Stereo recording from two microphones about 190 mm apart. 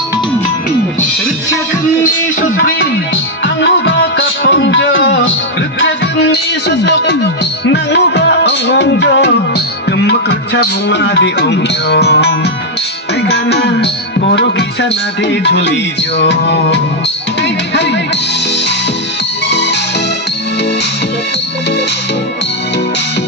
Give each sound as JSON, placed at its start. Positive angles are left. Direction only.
{"t": 2.4, "sound": "music", "side_deg": 50}
{"t": 3.4, "sound": "music", "side_deg": 70}